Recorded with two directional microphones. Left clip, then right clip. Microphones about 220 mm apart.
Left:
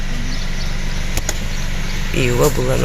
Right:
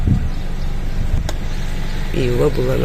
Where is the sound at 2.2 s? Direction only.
Centre (ahead or behind).